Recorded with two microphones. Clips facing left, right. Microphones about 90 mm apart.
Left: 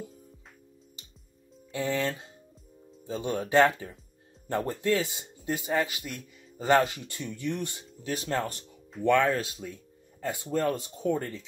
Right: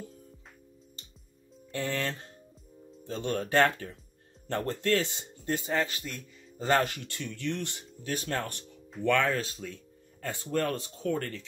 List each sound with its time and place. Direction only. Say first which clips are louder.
1.7 s speech: left 3 dB; 15° left (ahead or behind)